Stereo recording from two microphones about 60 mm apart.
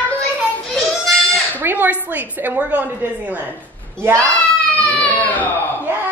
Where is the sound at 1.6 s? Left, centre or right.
Right.